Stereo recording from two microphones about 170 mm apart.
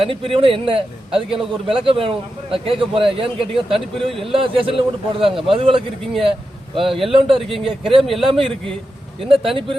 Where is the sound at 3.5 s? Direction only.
Centre (ahead or behind).